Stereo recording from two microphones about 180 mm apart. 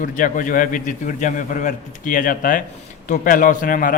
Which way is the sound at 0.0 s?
50° left (ahead or behind).